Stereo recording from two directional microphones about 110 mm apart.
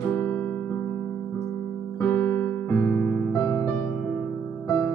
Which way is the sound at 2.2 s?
20° left (ahead or behind).